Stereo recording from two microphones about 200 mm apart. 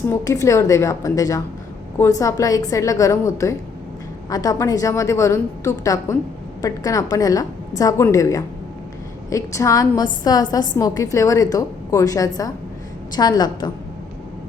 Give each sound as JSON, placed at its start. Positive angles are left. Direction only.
{"t": 0.1, "sound": "a woman's voice", "side_deg": 15}